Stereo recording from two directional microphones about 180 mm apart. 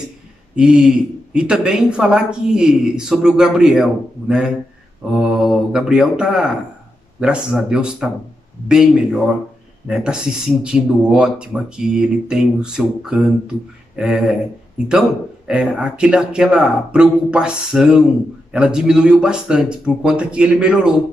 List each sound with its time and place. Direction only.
0.6 s a woman's voice: 5° right (ahead or behind)